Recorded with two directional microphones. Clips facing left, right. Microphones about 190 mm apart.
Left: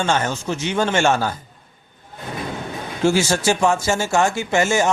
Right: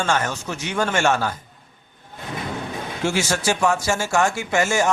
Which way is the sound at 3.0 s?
30° left (ahead or behind).